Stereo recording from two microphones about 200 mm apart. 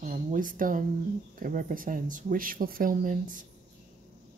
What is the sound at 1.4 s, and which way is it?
Speech, 45° right (ahead or behind).